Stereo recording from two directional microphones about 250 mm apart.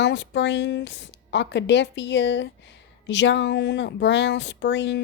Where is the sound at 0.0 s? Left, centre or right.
Left.